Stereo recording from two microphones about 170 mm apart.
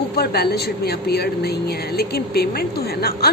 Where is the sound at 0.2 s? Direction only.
70° left (ahead or behind).